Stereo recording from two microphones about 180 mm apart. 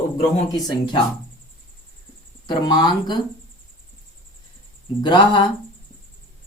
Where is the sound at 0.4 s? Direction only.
20° left (ahead or behind).